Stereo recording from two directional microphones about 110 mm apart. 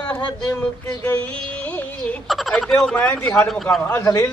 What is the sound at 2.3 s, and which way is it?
A man's voice, centre (ahead or behind).